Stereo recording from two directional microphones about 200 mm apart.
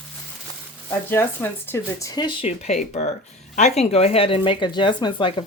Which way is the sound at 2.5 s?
35° left (ahead or behind).